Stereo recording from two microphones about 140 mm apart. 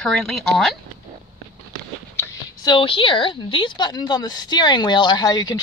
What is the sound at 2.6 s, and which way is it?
A woman's voice, 40° left (ahead or behind).